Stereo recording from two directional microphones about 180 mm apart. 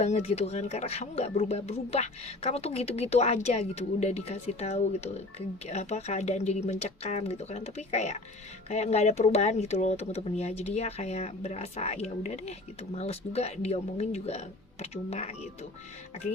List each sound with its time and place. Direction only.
0.0 s speech: 35° left (ahead or behind)